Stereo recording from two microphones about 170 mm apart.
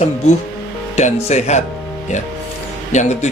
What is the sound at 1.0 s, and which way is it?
Speech, 40° left (ahead or behind).